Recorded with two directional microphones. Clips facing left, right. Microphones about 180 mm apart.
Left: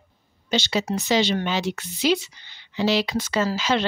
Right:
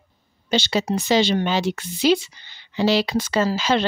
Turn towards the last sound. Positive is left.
turn(degrees=-30)  # may be behind; listen again after turning